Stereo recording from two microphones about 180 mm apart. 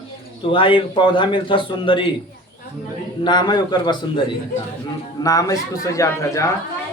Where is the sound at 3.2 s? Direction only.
25° left (ahead or behind).